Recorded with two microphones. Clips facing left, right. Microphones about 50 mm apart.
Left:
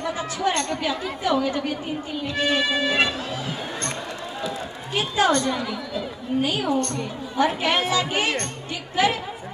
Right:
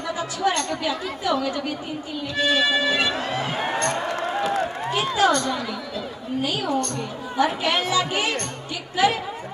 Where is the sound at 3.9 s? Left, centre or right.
Right.